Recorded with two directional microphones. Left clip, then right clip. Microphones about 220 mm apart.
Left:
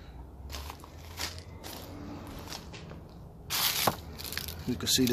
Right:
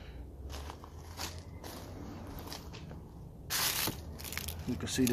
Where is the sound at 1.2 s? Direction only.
10° right (ahead or behind).